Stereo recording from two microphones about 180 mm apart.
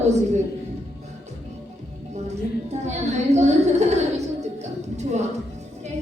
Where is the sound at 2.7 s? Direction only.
35° right (ahead or behind).